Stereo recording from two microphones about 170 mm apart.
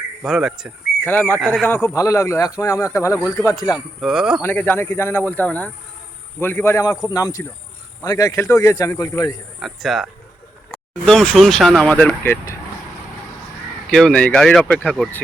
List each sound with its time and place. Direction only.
0.2 s speech: 5° right (ahead or behind)
1.0 s speech: 10° left (ahead or behind)
4.0 s speech: 5° right (ahead or behind)
4.4 s speech: 10° left (ahead or behind)
9.6 s speech: centre (ahead or behind)
13.9 s speech: 5° left (ahead or behind)